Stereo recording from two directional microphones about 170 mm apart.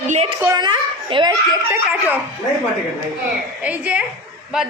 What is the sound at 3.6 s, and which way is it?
Speech, 10° right (ahead or behind).